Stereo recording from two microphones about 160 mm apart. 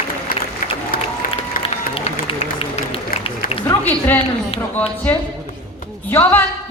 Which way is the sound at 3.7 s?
10° left (ahead or behind).